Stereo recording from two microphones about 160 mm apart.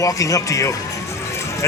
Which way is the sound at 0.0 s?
20° left (ahead or behind).